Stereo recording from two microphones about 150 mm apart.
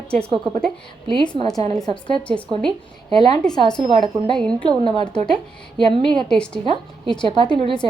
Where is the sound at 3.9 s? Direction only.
35° right (ahead or behind).